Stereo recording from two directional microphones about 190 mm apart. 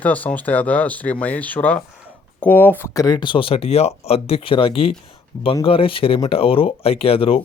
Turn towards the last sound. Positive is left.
turn(degrees=30)  # may be behind; listen again after turning